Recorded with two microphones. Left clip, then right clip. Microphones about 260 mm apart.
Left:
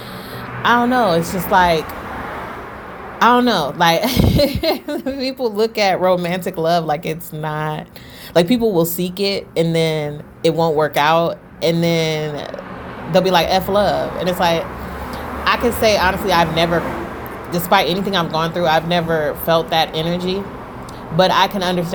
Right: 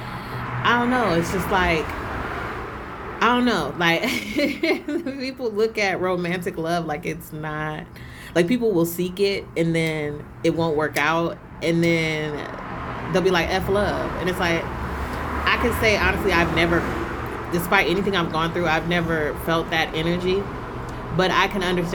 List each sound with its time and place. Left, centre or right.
0.6 s a woman's voice: centre
3.2 s a woman's voice: centre